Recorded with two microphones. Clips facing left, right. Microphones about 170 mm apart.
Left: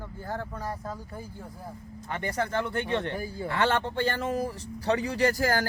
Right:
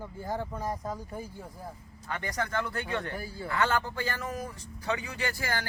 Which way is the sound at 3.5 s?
30° left (ahead or behind).